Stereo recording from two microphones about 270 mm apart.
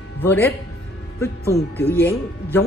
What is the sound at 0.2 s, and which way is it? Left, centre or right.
Speech, centre.